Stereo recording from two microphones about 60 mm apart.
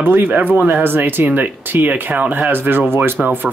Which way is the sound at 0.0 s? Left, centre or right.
Right.